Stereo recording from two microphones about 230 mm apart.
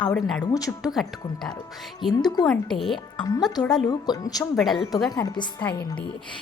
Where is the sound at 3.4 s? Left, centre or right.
Centre.